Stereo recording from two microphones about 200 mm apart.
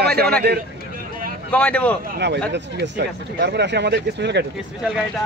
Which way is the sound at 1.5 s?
5° left (ahead or behind).